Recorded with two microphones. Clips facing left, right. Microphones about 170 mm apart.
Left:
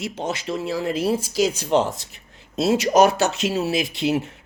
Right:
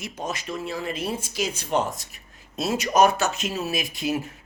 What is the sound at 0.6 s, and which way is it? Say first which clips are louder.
Speech: left 8 dB; 85° left.